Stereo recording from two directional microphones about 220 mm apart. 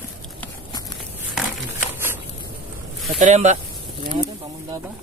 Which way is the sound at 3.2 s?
30° right (ahead or behind).